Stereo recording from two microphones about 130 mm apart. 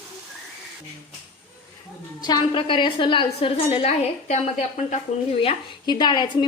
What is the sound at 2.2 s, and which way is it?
A woman's voice, 35° left (ahead or behind).